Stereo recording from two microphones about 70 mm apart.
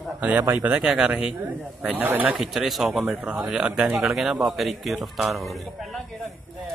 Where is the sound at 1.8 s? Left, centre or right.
Right.